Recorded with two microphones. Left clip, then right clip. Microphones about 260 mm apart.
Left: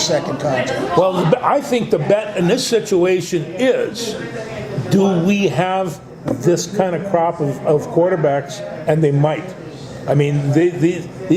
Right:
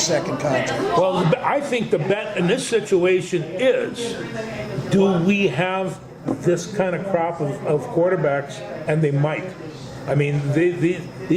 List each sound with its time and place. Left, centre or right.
0.0 s speech: centre
0.9 s a man's voice: left
4.9 s a man's voice: left